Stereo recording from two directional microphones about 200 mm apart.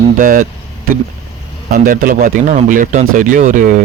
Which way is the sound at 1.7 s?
45° right (ahead or behind).